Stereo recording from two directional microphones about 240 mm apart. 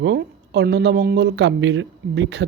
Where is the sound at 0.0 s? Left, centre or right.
Right.